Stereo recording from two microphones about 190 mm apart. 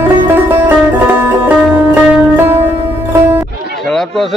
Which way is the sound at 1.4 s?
10° right (ahead or behind).